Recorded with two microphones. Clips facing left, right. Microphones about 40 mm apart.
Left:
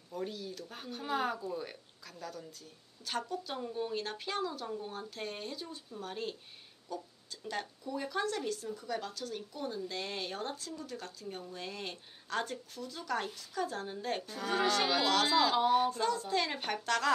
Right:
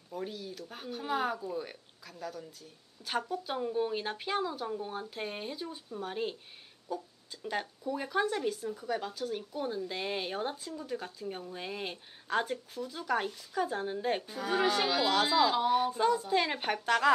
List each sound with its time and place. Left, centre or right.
0.1 s speech: centre
15.9 s speech: centre